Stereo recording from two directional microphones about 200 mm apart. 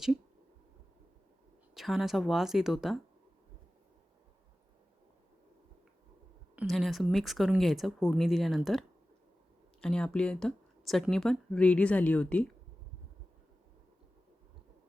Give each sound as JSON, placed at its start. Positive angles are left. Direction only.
{"t": 1.7, "sound": "speech", "side_deg": 0}
{"t": 6.6, "sound": "speech", "side_deg": 0}
{"t": 9.8, "sound": "speech", "side_deg": 5}